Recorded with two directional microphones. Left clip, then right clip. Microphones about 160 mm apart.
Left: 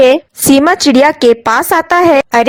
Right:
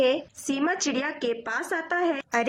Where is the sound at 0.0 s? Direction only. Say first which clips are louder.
Left 16 dB; 50° left (ahead or behind).